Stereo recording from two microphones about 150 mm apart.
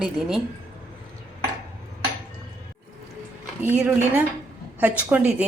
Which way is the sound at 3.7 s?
10° right (ahead or behind).